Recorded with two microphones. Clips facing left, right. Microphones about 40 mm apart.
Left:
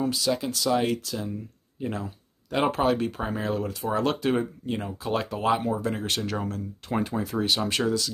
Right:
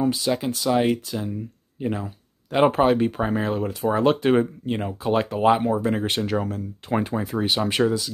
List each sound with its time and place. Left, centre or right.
0.0 s speech: right
6.2 s speech: centre
7.0 s speech: right